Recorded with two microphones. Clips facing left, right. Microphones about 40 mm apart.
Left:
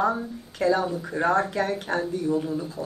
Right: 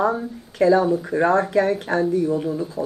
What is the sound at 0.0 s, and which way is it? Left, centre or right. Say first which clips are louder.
Speech: right 3 dB; centre.